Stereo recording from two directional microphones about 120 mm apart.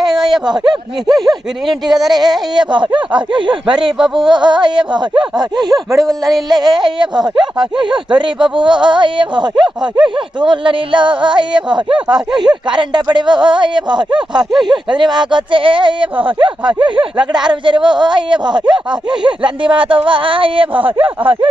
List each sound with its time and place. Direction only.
0.1 s a sound: 5° right (ahead or behind)
0.5 s speech: 35° right (ahead or behind)
4.0 s speech: 5° right (ahead or behind)
4.3 s speech: 40° right (ahead or behind)
5.9 s speech: centre (ahead or behind)
6.5 s speech: 35° right (ahead or behind)
12.1 s speech: 5° right (ahead or behind)
12.6 s speech: 40° right (ahead or behind)